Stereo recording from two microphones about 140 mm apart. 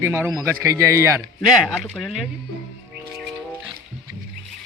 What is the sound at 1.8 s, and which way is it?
Music, 5° left (ahead or behind).